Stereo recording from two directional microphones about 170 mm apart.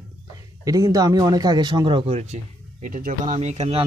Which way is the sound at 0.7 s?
20° right (ahead or behind).